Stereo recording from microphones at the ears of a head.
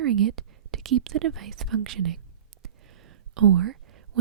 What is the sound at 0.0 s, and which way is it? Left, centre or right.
Speech, right.